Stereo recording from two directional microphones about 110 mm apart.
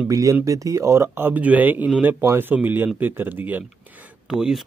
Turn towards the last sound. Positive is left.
turn(degrees=-5)  # may be behind; listen again after turning